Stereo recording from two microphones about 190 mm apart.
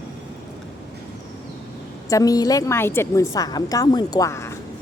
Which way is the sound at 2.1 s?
20° left (ahead or behind).